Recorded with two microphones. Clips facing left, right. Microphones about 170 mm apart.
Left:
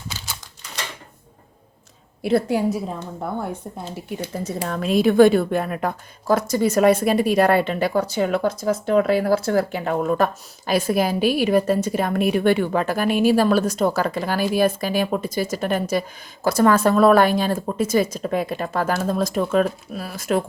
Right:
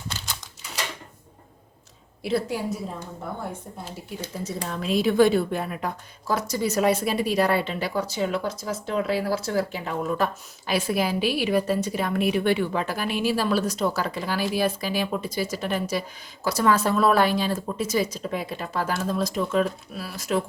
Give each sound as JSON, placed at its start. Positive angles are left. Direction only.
{"t": 2.2, "sound": "a woman's voice", "side_deg": 60}
{"t": 4.4, "sound": "a woman's voice", "side_deg": 55}
{"t": 10.7, "sound": "a woman's voice", "side_deg": 45}